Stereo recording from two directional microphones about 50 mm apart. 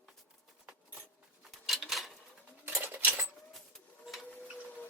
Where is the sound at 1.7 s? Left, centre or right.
Centre.